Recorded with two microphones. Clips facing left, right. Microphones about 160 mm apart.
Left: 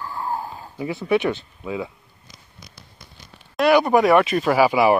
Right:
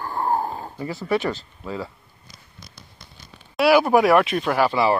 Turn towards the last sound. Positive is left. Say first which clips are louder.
# left 3 dB
turn(degrees=10)  # may be behind; listen again after turning